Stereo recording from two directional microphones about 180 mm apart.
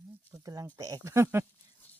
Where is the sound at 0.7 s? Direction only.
20° right (ahead or behind).